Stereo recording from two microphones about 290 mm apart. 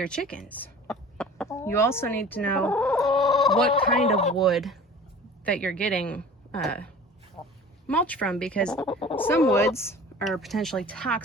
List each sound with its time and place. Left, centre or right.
0.0 s speech: centre
0.4 s chicken: centre
4.4 s speech: centre
8.9 s speech: centre
9.1 s speech: centre